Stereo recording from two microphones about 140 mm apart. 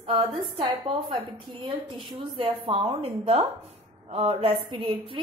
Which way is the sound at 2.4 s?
40° right (ahead or behind).